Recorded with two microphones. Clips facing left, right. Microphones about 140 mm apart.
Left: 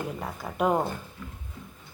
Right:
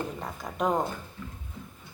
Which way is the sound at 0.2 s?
5° left (ahead or behind).